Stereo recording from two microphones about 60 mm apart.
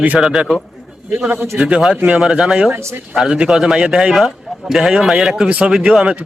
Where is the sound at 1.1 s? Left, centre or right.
Right.